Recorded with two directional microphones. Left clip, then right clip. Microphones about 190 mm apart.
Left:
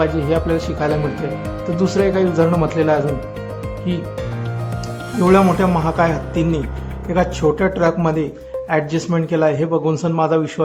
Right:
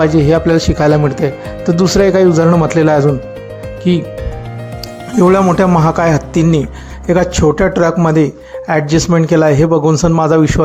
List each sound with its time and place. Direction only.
0.0 s speech: 35° right (ahead or behind)
5.2 s speech: 35° right (ahead or behind)